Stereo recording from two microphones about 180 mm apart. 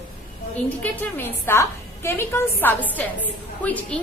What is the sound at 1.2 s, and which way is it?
A woman's voice, 15° left (ahead or behind).